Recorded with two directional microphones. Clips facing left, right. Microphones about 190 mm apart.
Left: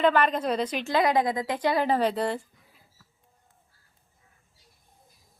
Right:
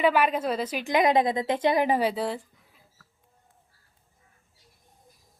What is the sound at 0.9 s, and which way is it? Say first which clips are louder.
Speech: right 2 dB; 20° right (ahead or behind).